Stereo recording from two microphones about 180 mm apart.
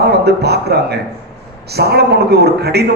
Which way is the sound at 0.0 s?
65° right (ahead or behind).